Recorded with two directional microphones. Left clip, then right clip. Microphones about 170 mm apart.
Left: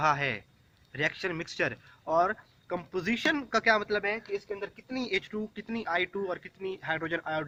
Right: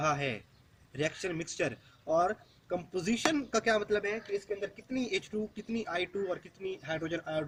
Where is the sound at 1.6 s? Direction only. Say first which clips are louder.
Left 5 dB; 50° left (ahead or behind).